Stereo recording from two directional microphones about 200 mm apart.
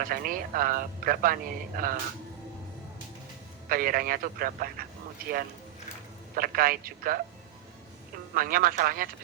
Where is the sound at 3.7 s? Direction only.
45° right (ahead or behind).